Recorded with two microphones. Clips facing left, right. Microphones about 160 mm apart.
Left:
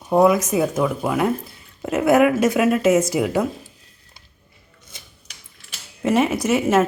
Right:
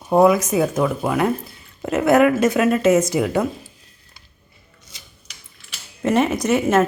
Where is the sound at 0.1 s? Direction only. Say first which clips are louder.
Right 1 dB; centre (ahead or behind).